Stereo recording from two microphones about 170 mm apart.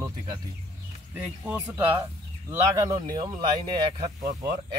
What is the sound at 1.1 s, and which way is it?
Speech, 10° right (ahead or behind).